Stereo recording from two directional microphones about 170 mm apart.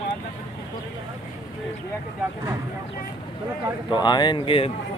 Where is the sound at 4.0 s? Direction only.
25° left (ahead or behind).